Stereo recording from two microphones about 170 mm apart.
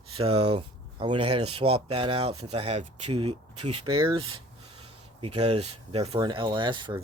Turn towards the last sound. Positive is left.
turn(degrees=-30)  # may be behind; listen again after turning